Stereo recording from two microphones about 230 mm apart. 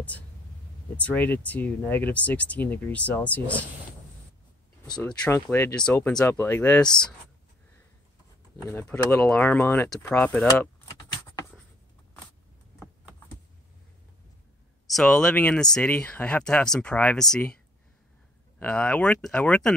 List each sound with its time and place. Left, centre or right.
0.9 s speech: centre
5.2 s speech: centre
8.6 s speech: centre
14.9 s speech: centre
18.6 s speech: centre